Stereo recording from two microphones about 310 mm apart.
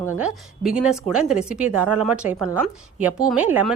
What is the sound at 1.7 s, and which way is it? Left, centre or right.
Speech, right.